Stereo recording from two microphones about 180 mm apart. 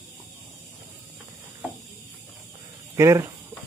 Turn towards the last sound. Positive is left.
turn(degrees=-15)  # may be behind; listen again after turning